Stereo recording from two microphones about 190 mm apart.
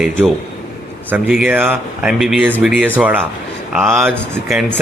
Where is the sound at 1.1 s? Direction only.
10° right (ahead or behind).